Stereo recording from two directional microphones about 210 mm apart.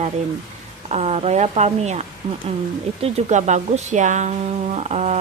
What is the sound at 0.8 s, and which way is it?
Speech, 30° right (ahead or behind).